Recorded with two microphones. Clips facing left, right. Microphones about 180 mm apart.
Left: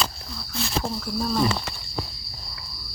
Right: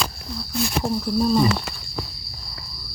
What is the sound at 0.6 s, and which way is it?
Speech, 15° right (ahead or behind).